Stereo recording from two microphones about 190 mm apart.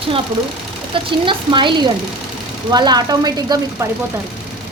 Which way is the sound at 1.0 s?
25° right (ahead or behind).